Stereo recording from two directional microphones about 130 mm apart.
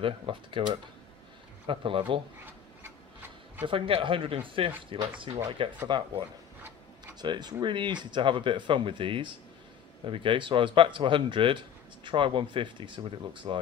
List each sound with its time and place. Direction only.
0.0 s speech: 40° right (ahead or behind)
1.7 s speech: 45° right (ahead or behind)
2.4 s rub: 15° right (ahead or behind)
3.6 s speech: 45° right (ahead or behind)